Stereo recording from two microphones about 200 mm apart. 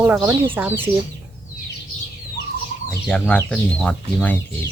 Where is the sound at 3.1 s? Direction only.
5° left (ahead or behind).